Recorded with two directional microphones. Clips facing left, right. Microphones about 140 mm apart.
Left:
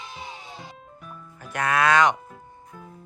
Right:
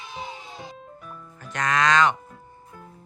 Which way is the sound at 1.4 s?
10° left (ahead or behind).